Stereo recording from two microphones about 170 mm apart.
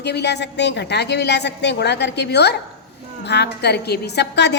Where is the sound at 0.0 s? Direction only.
80° left.